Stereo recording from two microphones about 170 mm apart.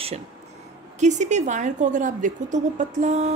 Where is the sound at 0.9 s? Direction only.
45° right (ahead or behind).